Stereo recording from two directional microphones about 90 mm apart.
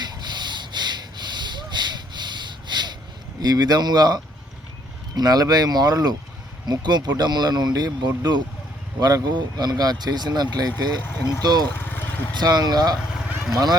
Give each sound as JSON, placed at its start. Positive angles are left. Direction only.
{"t": 0.0, "sound": "a sound", "side_deg": -55}
{"t": 3.4, "sound": "speech", "side_deg": -50}
{"t": 11.0, "sound": "speech", "side_deg": 25}
{"t": 11.4, "sound": "speech", "side_deg": -50}
{"t": 11.8, "sound": "vehicle", "side_deg": 25}
{"t": 12.3, "sound": "speech", "side_deg": -50}
{"t": 13.2, "sound": "vehicle", "side_deg": -5}